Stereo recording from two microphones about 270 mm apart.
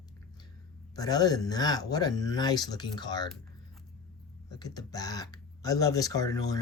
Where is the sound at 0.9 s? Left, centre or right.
Centre.